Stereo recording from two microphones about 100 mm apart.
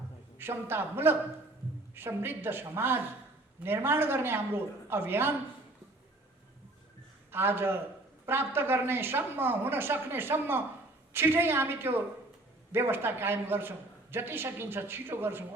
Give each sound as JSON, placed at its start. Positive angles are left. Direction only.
{"t": 0.3, "sound": "a man's voice", "side_deg": -20}
{"t": 7.3, "sound": "a man's voice", "side_deg": -20}